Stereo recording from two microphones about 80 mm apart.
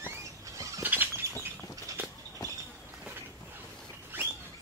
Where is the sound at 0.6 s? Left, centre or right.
Right.